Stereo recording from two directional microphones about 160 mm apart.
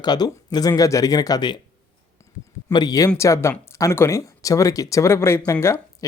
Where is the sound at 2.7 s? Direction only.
25° left (ahead or behind).